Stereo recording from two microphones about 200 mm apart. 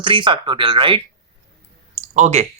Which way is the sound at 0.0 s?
25° right (ahead or behind).